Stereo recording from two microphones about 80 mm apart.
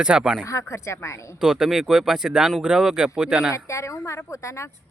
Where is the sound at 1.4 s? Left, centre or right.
Centre.